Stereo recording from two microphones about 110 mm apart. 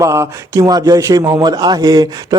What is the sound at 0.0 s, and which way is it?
Speech, 30° right (ahead or behind).